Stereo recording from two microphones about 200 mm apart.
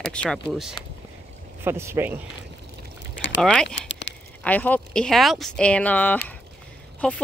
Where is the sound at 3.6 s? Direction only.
60° left (ahead or behind).